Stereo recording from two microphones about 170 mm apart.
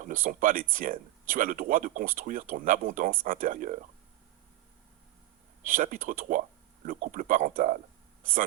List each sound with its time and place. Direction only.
0.0 s speech: 50° right (ahead or behind)
5.6 s speech: 50° right (ahead or behind)